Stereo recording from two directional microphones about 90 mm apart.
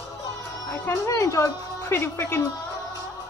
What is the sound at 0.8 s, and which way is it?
Speech, 35° left (ahead or behind).